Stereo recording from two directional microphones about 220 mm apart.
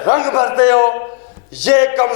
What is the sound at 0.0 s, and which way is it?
A man's voice, 20° left (ahead or behind).